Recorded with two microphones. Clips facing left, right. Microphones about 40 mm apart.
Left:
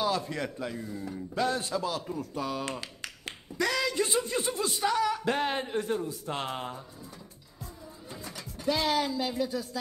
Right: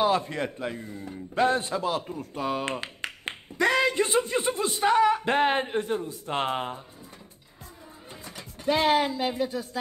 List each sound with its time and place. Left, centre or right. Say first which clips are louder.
0.0 s a man's voice: right 5 dB; right
8.1 s speech: left 1 dB; right